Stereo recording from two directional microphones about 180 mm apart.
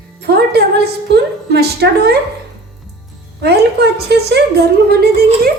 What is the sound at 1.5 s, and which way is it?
Speech, 60° right (ahead or behind).